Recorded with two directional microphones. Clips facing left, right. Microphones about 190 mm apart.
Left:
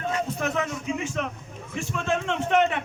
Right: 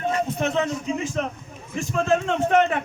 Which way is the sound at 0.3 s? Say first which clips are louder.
Right 4 dB; 25° right (ahead or behind).